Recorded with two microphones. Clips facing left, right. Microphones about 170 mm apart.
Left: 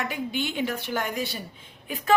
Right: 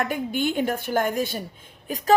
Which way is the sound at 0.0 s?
50° right (ahead or behind).